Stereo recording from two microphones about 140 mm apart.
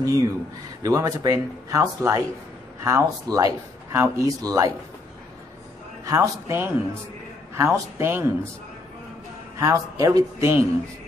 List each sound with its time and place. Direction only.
0.0 s speech: 25° right (ahead or behind)
6.0 s a man's voice: 20° right (ahead or behind)
9.6 s speech: 25° right (ahead or behind)